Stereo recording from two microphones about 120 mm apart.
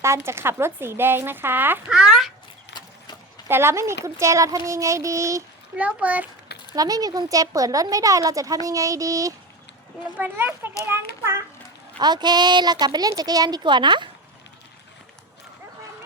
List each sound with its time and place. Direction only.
0.0 s a woman's voice: 20° right (ahead or behind); by 2.3 s 5° right (ahead or behind)
3.5 s a woman's voice: 20° right (ahead or behind)
5.7 s speech: 10° right (ahead or behind)
6.7 s a woman's voice: 30° right (ahead or behind)
10.2 s a woman's voice: 15° right (ahead or behind)
11.9 s a woman's voice: 35° right (ahead or behind)